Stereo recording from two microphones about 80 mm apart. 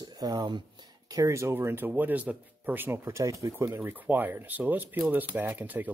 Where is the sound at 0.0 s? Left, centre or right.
Right.